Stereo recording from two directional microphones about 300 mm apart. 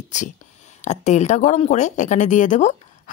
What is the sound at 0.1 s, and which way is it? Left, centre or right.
Speech, left.